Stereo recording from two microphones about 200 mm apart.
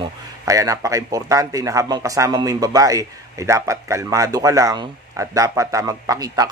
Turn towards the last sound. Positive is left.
turn(degrees=-15)  # may be behind; listen again after turning